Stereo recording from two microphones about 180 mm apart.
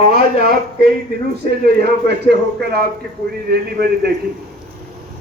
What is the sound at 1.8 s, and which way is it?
Speech, 65° right (ahead or behind).